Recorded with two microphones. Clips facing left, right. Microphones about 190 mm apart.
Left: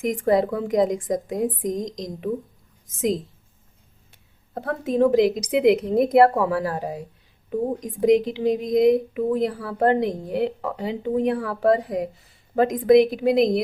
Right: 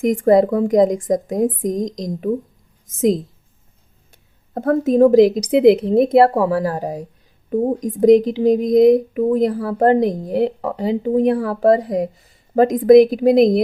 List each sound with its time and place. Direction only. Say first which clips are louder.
0.0 s a woman's voice: right 7 dB; 45° right (ahead or behind)
4.5 s a woman's voice: right 8 dB; 45° right (ahead or behind)